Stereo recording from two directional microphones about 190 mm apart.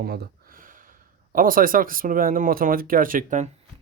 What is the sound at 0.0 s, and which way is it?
Speech, 55° right (ahead or behind).